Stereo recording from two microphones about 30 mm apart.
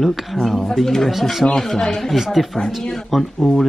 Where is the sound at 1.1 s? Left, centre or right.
Centre.